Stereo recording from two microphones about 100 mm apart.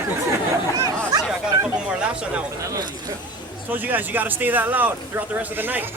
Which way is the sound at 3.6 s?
20° right (ahead or behind).